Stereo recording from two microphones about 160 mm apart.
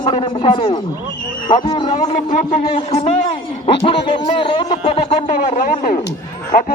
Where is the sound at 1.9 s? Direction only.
45° left (ahead or behind).